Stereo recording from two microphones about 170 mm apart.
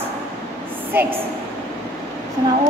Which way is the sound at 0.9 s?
10° right (ahead or behind).